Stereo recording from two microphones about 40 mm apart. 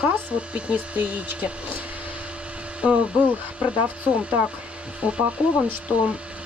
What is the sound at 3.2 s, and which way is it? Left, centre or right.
Speech, right.